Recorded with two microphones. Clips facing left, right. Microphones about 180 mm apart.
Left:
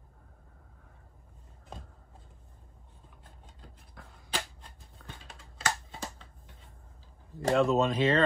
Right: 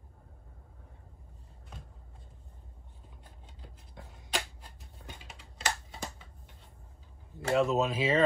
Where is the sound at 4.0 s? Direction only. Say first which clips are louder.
Right 2 dB; 20° right (ahead or behind).